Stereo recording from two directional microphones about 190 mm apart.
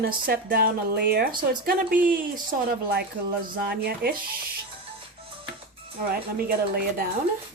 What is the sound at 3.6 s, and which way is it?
Speech, 55° right (ahead or behind).